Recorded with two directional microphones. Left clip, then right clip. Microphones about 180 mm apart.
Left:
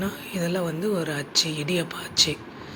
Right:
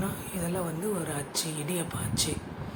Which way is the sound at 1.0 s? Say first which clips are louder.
Left 9 dB; 15° left (ahead or behind).